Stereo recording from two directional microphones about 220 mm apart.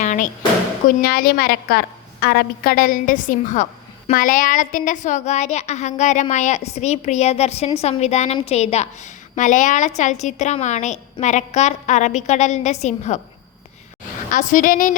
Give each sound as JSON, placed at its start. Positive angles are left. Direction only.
{"t": 0.0, "sound": "a sound", "side_deg": 35}
{"t": 0.9, "sound": "a woman's voice", "side_deg": 40}
{"t": 14.3, "sound": "a woman's voice", "side_deg": 35}